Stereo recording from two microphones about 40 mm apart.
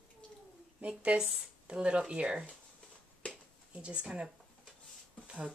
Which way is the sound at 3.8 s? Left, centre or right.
Right.